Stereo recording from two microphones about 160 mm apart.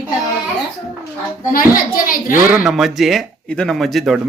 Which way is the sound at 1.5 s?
65° left (ahead or behind).